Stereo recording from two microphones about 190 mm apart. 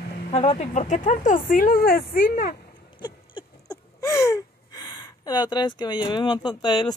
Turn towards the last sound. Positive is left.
turn(degrees=20)  # may be behind; listen again after turning